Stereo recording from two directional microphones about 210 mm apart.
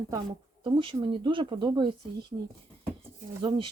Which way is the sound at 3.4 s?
25° right (ahead or behind).